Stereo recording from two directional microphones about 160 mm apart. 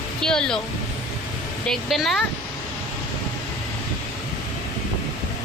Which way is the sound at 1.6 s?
Centre (ahead or behind).